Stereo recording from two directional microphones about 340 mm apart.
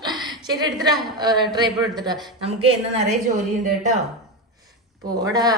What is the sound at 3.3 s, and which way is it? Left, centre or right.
Speech, right.